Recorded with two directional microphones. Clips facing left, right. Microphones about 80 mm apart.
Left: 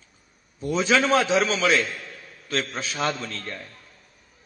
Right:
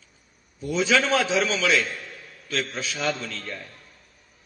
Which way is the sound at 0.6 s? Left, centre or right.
Left.